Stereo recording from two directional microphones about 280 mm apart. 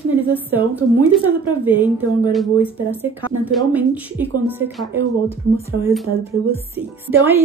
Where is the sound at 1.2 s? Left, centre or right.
Centre.